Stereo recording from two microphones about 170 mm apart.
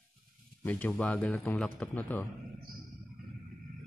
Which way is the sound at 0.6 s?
10° left (ahead or behind).